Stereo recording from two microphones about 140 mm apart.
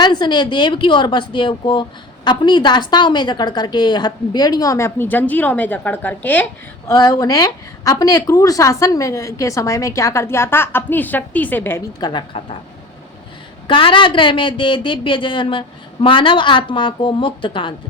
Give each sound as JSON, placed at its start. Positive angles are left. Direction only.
{"t": 0.0, "sound": "speech", "side_deg": 30}
{"t": 6.9, "sound": "a woman's voice", "side_deg": 30}
{"t": 11.9, "sound": "speech", "side_deg": 30}
{"t": 13.7, "sound": "speech", "side_deg": 35}